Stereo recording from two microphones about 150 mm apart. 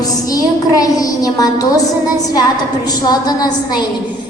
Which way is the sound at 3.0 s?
25° left (ahead or behind).